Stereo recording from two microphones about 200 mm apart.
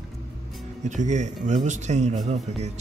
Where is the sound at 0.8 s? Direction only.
35° right (ahead or behind).